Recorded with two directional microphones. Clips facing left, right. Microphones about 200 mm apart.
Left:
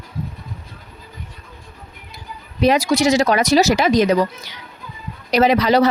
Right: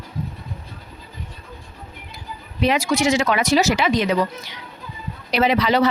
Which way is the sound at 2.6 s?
40° left (ahead or behind).